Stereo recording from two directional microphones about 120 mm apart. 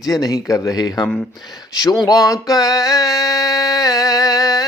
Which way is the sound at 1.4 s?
35° left (ahead or behind).